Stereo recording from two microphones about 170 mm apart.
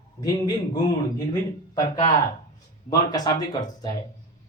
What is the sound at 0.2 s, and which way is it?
Speech, 20° left (ahead or behind).